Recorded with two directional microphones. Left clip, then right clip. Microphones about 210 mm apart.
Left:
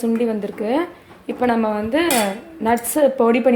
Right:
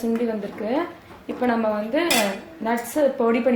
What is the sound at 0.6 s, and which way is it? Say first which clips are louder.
A woman's voice: left 4 dB; 50° left (ahead or behind).